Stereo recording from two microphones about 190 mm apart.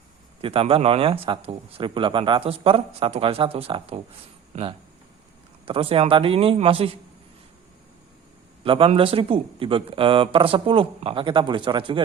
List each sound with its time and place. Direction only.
0.4 s speech: 30° right (ahead or behind)
8.6 s speech: 30° right (ahead or behind)